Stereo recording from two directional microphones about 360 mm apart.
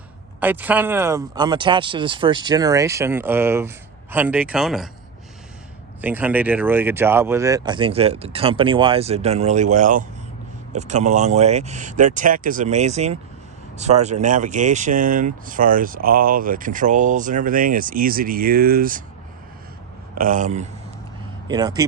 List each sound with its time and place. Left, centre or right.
0.3 s speech: centre
6.0 s speech: centre; by 19.0 s right
20.1 s speech: right